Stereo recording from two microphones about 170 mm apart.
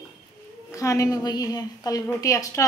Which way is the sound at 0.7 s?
20° left (ahead or behind).